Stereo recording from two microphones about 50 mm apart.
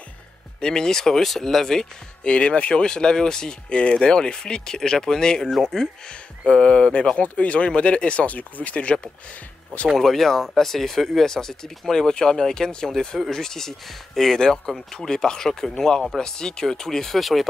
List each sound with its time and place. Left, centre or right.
0.6 s speech: centre
2.2 s speech: left
6.5 s speech: centre
9.9 s speech: centre